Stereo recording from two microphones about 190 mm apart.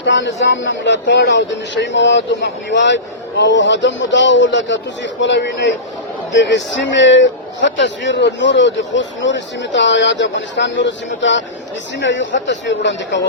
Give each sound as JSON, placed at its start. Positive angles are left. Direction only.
{"t": 0.0, "sound": "speech", "side_deg": 70}